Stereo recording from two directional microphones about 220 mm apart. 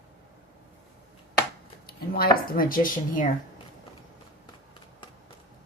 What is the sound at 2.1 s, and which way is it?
Speech, 45° left (ahead or behind).